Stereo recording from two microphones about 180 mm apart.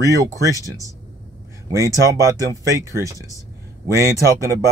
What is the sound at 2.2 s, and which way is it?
Speech, 20° right (ahead or behind).